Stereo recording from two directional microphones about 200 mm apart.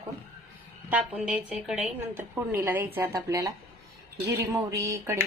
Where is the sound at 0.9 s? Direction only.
5° right (ahead or behind).